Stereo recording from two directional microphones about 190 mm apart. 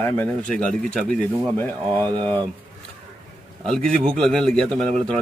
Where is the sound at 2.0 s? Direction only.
25° right (ahead or behind).